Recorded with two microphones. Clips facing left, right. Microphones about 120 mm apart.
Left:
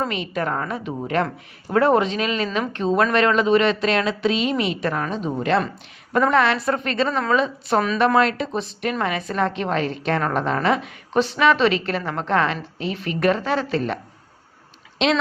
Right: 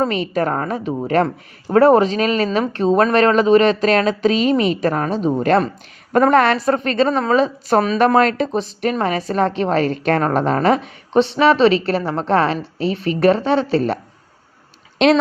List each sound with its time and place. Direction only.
0.0 s a woman's voice: 40° right (ahead or behind)